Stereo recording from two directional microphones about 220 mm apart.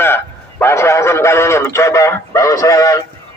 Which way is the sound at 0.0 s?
10° left (ahead or behind).